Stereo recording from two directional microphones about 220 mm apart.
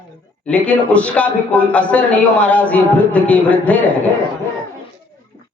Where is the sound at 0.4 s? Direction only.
5° left (ahead or behind).